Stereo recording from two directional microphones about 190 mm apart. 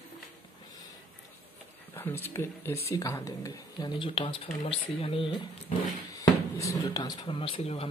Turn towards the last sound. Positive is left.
turn(degrees=30)  # may be behind; listen again after turning